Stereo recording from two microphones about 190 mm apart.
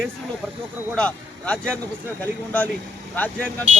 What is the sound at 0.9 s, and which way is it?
Speech, 5° left (ahead or behind).